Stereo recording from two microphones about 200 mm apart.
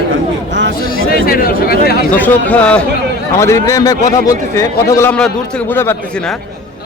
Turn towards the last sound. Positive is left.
turn(degrees=10)  # may be behind; listen again after turning